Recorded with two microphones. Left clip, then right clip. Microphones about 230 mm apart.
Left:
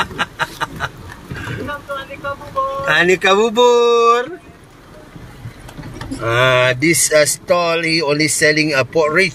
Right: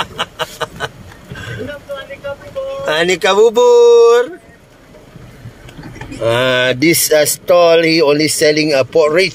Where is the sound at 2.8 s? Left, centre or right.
Right.